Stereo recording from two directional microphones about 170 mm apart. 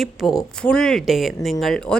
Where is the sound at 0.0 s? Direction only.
Centre (ahead or behind).